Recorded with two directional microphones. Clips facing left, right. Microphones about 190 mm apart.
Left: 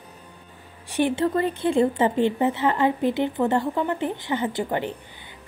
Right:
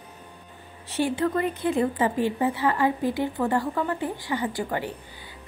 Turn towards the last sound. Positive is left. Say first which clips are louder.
# left 3 dB
turn(degrees=25)  # may be behind; listen again after turning